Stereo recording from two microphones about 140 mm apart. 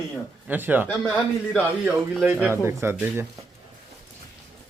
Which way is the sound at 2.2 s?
15° right (ahead or behind).